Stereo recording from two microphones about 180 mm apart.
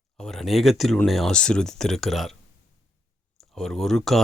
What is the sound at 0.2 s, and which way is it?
Speech, centre (ahead or behind).